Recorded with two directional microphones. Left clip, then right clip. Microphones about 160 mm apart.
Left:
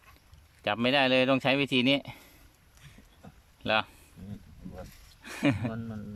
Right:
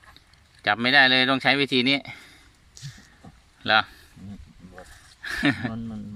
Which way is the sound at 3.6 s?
15° left (ahead or behind).